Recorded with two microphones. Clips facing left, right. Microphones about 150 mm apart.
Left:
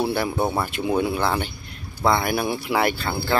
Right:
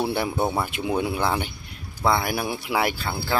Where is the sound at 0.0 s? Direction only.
15° right (ahead or behind).